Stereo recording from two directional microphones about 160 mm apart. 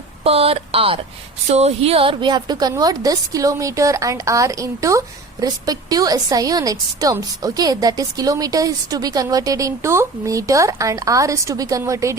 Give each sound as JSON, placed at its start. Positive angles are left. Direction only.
{"t": 0.3, "sound": "a woman's voice", "side_deg": -35}